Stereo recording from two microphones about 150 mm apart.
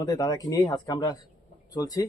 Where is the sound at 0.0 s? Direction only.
25° left (ahead or behind).